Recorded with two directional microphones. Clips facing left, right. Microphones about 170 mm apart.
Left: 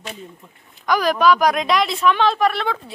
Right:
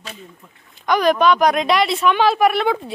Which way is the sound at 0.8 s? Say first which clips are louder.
Right 1 dB; centre (ahead or behind).